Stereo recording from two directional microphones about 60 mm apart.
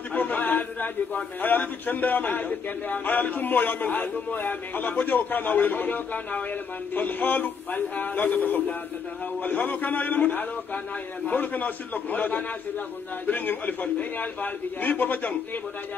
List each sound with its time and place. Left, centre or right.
0.1 s a man's voice: left